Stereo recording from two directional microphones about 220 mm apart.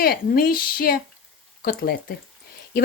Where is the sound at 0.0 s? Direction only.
40° left (ahead or behind).